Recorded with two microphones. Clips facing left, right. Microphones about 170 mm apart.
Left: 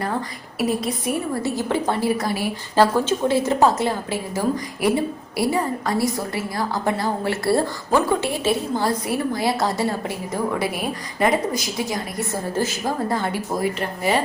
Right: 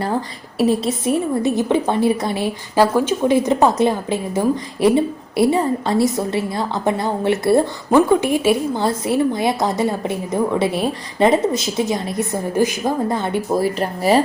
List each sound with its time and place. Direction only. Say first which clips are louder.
0.6 s a woman's voice: right 5 dB; 25° right (ahead or behind)
2.8 s a woman's voice: right 3 dB; 10° right (ahead or behind)
13.6 s speech: right 4 dB; 35° right (ahead or behind)